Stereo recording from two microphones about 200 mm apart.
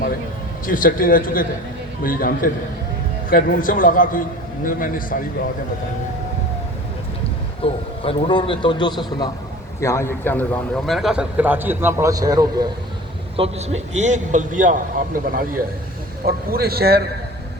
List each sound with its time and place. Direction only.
0.6 s a man's voice: 45° left (ahead or behind)
7.6 s a man's voice: 25° left (ahead or behind); by 12.6 s 20° right (ahead or behind)
13.3 s a man's voice: 30° right (ahead or behind); by 17.0 s 50° right (ahead or behind)